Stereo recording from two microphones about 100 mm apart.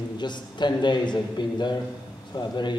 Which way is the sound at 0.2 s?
50° left (ahead or behind).